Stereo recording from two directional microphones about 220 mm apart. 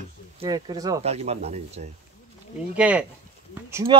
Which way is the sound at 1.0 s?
30° right (ahead or behind).